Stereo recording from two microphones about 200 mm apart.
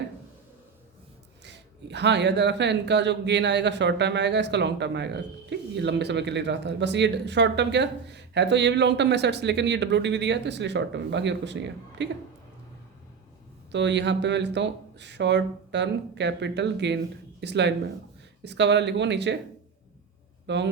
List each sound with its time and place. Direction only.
1.5 s speech: 60° right (ahead or behind)
13.7 s speech: 60° right (ahead or behind)
20.5 s speech: 60° right (ahead or behind)